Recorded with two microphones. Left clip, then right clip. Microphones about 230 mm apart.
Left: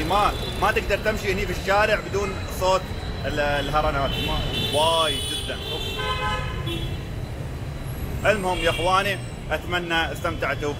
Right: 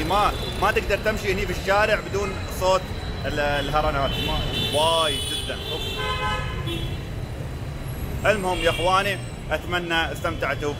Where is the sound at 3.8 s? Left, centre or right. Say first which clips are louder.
Even; right.